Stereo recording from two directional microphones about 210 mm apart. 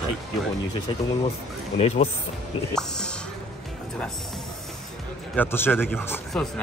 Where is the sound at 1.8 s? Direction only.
30° left (ahead or behind).